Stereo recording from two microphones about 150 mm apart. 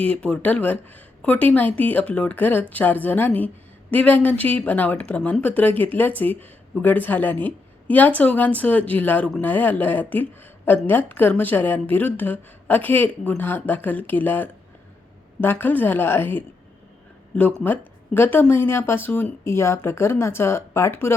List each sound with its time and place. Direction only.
0.0 s speech: 10° left (ahead or behind)
17.6 s speech: 15° left (ahead or behind)